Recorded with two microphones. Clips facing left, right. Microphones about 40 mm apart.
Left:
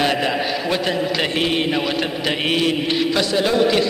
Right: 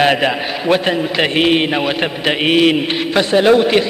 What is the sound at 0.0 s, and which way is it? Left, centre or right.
Speech, right.